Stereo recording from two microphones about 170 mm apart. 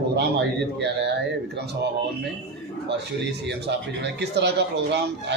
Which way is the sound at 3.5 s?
85° right.